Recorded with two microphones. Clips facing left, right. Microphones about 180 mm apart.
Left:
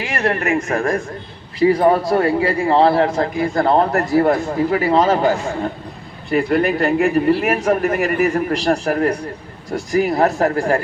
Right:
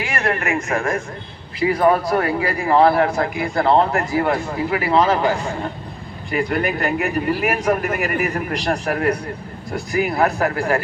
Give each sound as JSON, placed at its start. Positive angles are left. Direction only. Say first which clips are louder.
{"t": 0.3, "sound": "speech", "louder": "left 4 dB", "side_deg": 35}
{"t": 3.2, "sound": "speech", "louder": "left 3 dB", "side_deg": 40}
{"t": 6.3, "sound": "speech", "louder": "left 4 dB", "side_deg": 35}